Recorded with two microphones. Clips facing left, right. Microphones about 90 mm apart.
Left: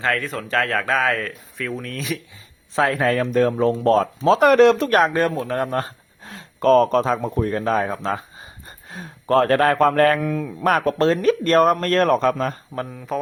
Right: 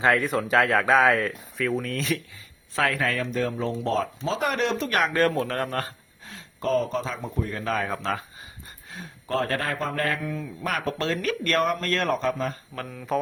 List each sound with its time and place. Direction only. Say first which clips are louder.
0.0 s speech: right 2 dB; 15° right (ahead or behind); by 2.2 s 5° left (ahead or behind)
2.7 s speech: left 6 dB; 30° left (ahead or behind)
3.3 s speech: left 9 dB; 50° left (ahead or behind)
4.3 s speech: left 14 dB; 75° left (ahead or behind); by 4.9 s 90° left
4.9 s speech: left 7 dB; 35° left (ahead or behind)
5.1 s a man's voice: left 2 dB; 15° left (ahead or behind)
6.6 s speech: left 10 dB; 80° left; by 7.6 s 55° left (ahead or behind)
7.6 s speech: left 6 dB; 30° left (ahead or behind)
8.9 s speech: left 9 dB; 50° left (ahead or behind)
12.1 s speech: left 7 dB; 70° left (ahead or behind)
12.7 s a man's voice: left 7 dB; 25° left (ahead or behind)